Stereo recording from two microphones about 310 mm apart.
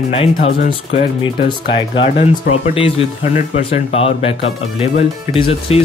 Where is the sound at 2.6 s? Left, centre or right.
Centre.